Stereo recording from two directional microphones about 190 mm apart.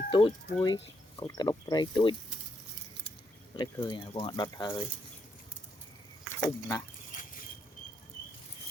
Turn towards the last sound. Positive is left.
turn(degrees=20)  # may be behind; listen again after turning